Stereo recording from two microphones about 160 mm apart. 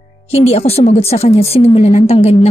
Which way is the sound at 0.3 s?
40° left (ahead or behind).